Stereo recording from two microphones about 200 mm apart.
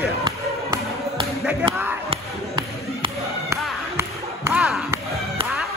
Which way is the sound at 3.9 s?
15° right (ahead or behind).